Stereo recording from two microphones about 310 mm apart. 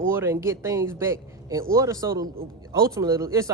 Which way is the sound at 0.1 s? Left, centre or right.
Centre.